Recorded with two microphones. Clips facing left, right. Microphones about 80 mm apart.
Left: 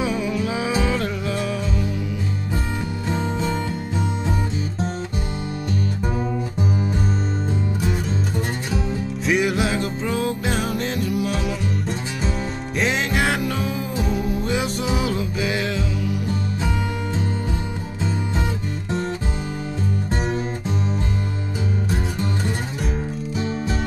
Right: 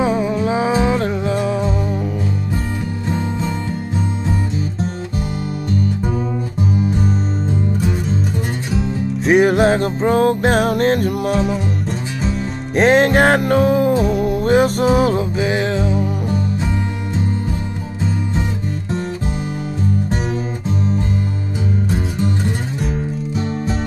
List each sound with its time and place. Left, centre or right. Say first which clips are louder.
0.0 s music: right 6 dB; right
9.2 s music: right 8 dB; right
11.3 s music: right 7 dB; right
12.7 s music: right 10 dB; right
15.3 s music: right 5 dB; right